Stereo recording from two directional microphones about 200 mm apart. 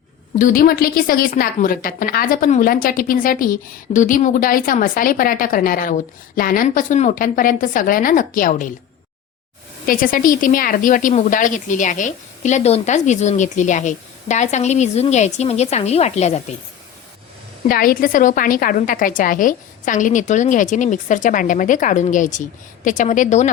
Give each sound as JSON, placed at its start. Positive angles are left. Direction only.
{"t": 0.3, "sound": "a woman's voice", "side_deg": 45}
{"t": 9.8, "sound": "speech", "side_deg": 45}
{"t": 17.7, "sound": "speech", "side_deg": 45}